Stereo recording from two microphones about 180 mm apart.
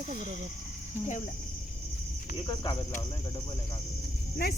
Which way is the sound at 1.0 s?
40° left (ahead or behind).